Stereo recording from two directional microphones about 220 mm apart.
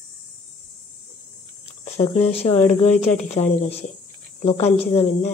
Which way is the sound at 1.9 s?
30° left (ahead or behind).